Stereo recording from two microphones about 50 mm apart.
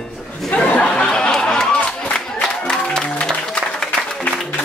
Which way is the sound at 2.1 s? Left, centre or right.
Centre.